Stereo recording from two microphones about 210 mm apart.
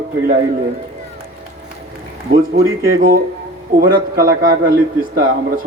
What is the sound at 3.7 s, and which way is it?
Speech, 45° right (ahead or behind).